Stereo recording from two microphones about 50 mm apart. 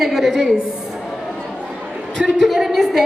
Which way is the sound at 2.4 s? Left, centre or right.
Centre.